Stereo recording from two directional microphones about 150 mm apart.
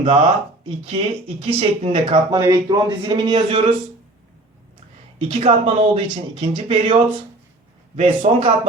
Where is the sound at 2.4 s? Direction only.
25° right (ahead or behind).